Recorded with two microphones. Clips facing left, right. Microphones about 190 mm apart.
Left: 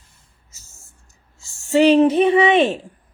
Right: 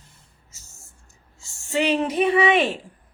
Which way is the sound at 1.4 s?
35° left (ahead or behind).